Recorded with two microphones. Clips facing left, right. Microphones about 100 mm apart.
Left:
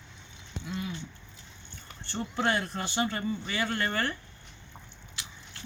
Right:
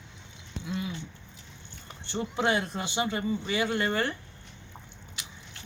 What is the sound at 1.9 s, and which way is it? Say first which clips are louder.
Speech: right 3 dB; 15° right (ahead or behind).